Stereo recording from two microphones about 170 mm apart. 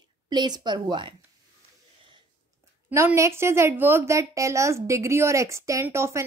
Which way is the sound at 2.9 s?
15° right (ahead or behind).